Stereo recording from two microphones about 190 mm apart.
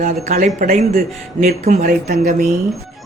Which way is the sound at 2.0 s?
55° right (ahead or behind).